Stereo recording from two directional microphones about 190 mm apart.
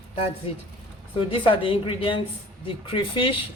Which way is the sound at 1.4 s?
25° left (ahead or behind).